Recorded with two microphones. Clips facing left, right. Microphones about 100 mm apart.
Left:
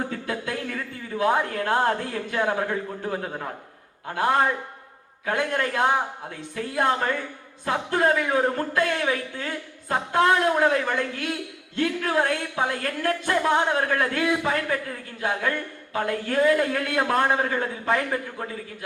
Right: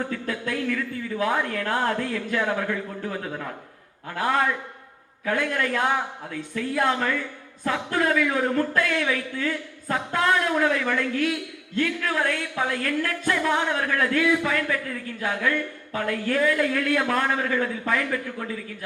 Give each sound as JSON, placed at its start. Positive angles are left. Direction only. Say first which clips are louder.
{"t": 0.1, "sound": "a woman's voice", "louder": "right 1 dB", "side_deg": 35}